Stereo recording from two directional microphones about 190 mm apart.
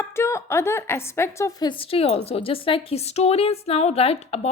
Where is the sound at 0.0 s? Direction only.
15° left (ahead or behind).